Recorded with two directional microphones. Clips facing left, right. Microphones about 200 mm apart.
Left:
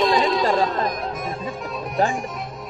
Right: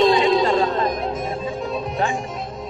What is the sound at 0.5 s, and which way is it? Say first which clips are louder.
Music: right 2 dB; 25° right (ahead or behind).